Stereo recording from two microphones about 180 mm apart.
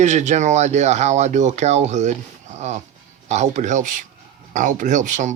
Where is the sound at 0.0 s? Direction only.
40° right (ahead or behind).